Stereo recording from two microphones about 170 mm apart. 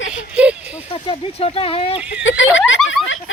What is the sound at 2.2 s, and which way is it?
Snicker, 90° left.